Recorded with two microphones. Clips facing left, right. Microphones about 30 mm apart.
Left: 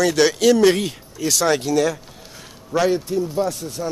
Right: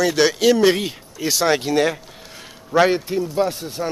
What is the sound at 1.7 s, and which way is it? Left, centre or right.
Speech, right.